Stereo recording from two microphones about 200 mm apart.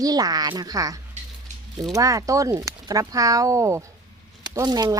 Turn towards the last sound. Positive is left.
turn(degrees=-20)  # may be behind; listen again after turning